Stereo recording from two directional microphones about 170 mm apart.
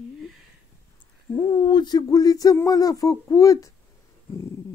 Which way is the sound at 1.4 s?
25° left (ahead or behind).